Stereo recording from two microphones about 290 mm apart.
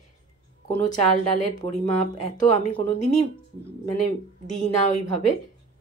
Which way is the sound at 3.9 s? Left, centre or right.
Left.